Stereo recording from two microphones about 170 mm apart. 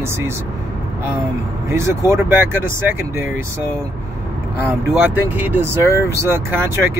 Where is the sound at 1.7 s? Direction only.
15° right (ahead or behind).